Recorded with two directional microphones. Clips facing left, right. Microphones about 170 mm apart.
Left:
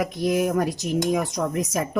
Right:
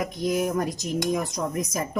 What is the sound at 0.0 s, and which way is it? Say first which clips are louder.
A woman's voice: left 3 dB; 70° left (ahead or behind).